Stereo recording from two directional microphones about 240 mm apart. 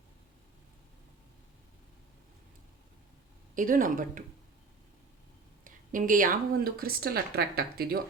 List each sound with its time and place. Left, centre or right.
3.5 s speech: right
5.6 s speech: right